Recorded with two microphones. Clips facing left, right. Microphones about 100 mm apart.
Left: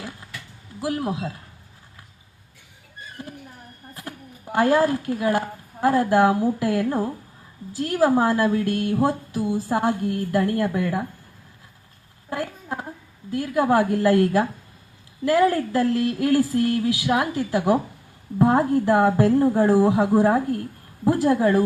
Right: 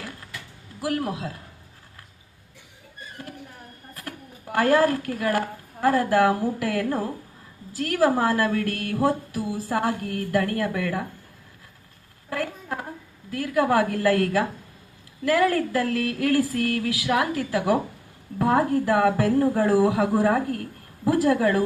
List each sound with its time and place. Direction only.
0.8 s a woman's voice: 20° left (ahead or behind)
4.5 s a woman's voice: 20° left (ahead or behind)
12.3 s a sound: 20° left (ahead or behind)
13.3 s a woman's voice: 25° left (ahead or behind)